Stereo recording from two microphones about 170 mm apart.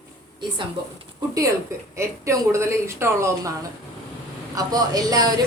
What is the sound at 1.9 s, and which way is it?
Speech, 15° right (ahead or behind).